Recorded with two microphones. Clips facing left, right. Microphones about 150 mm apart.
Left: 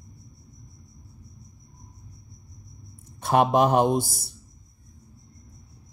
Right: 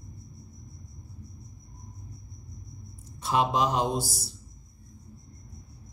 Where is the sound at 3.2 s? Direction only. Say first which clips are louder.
Left 5 dB; 55° left (ahead or behind).